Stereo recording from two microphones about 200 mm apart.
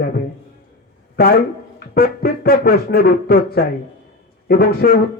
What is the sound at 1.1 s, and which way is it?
A man's voice, 50° left (ahead or behind).